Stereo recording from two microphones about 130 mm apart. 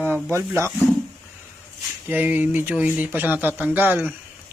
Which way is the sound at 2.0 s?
15° right (ahead or behind).